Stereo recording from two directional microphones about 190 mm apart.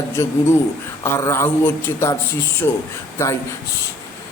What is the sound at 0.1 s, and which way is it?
Speech, 15° left (ahead or behind).